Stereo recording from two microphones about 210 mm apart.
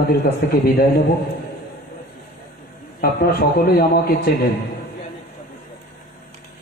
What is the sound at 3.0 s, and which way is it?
A man's voice, 50° left (ahead or behind).